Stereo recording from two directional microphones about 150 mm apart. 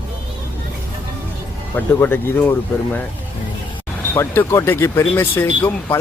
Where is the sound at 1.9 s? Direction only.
15° left (ahead or behind).